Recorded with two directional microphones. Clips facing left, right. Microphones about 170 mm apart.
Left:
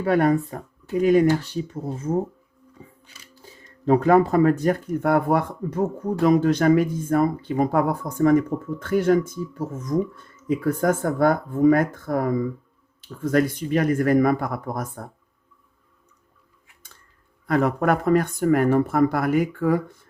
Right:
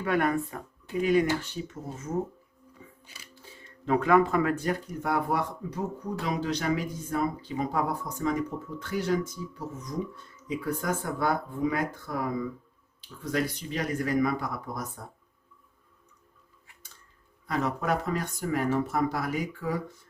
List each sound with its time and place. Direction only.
0.0 s speech: 35° left (ahead or behind)
2.8 s a sound: 35° left (ahead or behind)
3.4 s speech: 40° left (ahead or behind)
17.4 s speech: 55° left (ahead or behind)